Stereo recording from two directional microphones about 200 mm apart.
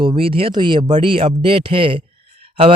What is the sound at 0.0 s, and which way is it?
Speech, 25° right (ahead or behind).